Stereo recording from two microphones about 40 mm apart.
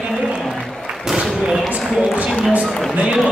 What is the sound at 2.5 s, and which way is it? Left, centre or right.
Run, right.